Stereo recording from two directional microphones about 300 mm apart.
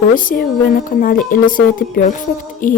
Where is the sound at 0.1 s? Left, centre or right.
Left.